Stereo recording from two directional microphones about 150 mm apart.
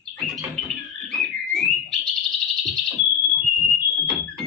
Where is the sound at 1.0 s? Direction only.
5° left (ahead or behind).